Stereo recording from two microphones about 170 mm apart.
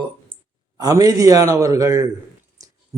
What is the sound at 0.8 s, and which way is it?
Speech, 20° right (ahead or behind).